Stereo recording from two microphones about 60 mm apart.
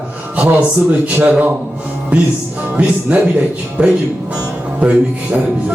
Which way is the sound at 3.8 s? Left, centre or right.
Right.